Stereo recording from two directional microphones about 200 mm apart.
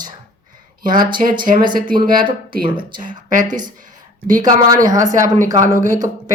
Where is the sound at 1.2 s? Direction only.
45° right (ahead or behind).